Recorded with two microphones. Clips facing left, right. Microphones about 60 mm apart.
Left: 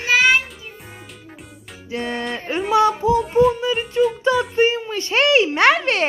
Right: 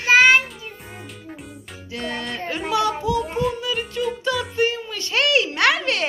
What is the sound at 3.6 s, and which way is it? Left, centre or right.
A child's voice, left.